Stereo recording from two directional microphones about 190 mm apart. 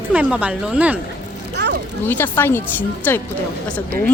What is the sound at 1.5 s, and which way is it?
Vehicle, 65° right (ahead or behind).